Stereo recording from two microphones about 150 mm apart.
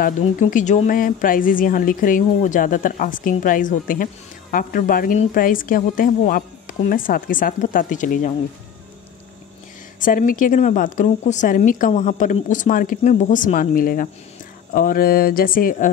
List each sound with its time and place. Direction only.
0.2 s speech: 60° left (ahead or behind)
9.9 s speech: 65° left (ahead or behind)